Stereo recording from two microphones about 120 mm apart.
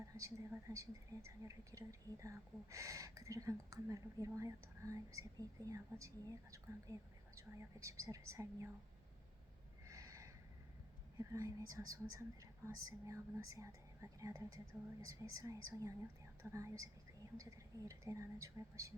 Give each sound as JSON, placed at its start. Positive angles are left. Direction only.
{"t": 0.0, "sound": "speech", "side_deg": -25}
{"t": 9.8, "sound": "a sound", "side_deg": -25}
{"t": 11.2, "sound": "speech", "side_deg": -25}